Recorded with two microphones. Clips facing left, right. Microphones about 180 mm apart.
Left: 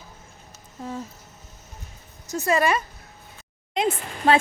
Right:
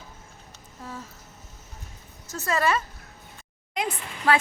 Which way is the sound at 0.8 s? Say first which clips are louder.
Left 6 dB; 20° left (ahead or behind).